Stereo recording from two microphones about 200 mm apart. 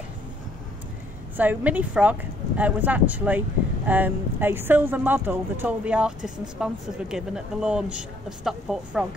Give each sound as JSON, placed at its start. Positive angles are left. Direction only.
{"t": 1.3, "sound": "speech", "side_deg": -10}